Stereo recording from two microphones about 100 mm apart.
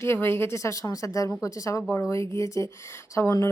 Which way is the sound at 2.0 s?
25° left (ahead or behind).